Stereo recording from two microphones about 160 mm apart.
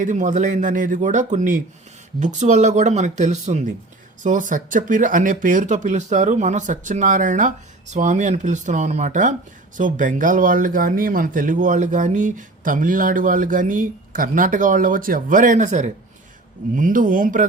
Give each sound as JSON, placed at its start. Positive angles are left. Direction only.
{"t": 0.0, "sound": "speech", "side_deg": -50}